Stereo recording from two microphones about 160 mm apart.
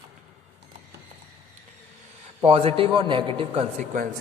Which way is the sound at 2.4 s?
35° right (ahead or behind).